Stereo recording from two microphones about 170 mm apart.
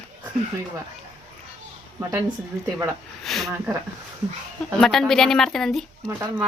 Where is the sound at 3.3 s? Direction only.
Centre (ahead or behind).